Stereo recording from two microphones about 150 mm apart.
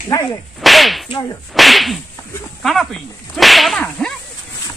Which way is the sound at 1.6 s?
Centre (ahead or behind).